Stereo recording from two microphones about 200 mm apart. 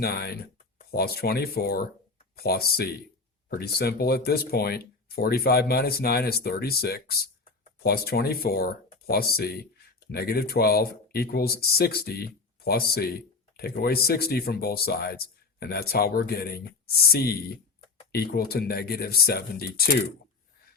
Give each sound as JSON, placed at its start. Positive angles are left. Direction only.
{"t": 0.0, "sound": "speech", "side_deg": 55}